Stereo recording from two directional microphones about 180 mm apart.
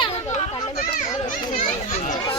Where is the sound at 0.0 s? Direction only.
35° left (ahead or behind).